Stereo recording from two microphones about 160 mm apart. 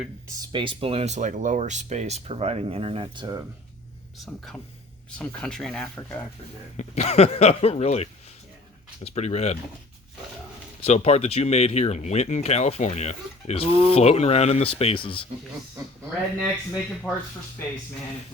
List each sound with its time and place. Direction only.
0.5 s speech: 30° right (ahead or behind)
5.1 s speech: 5° left (ahead or behind)
6.7 s speech: 45° left (ahead or behind)
9.1 s speech: 45° left (ahead or behind)
10.8 s speech: 40° left (ahead or behind)
17.1 s speech: 5° right (ahead or behind)